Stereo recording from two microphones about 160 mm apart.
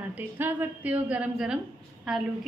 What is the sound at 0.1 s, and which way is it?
A woman's voice, 10° right (ahead or behind).